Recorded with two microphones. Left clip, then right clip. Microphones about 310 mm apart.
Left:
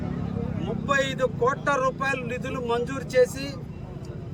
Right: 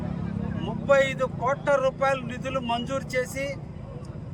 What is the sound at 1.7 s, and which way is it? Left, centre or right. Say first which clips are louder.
Speech: right 2 dB; centre.